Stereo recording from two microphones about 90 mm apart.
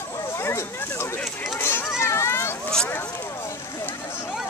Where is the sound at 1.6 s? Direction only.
25° left (ahead or behind).